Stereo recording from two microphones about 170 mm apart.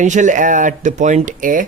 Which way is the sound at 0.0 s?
45° right (ahead or behind).